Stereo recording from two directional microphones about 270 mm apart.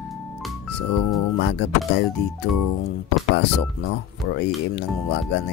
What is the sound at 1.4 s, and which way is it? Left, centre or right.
Speech, left.